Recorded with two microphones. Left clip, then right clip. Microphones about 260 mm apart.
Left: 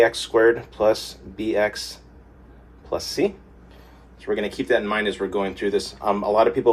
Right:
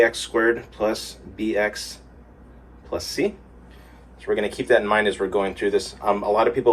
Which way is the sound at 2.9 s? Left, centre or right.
Centre.